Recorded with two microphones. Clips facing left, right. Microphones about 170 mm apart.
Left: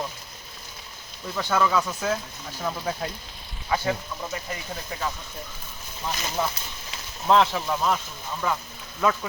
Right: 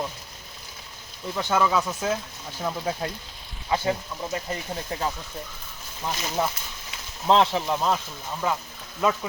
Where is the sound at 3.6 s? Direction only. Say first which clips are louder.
Right 1 dB; 25° right (ahead or behind).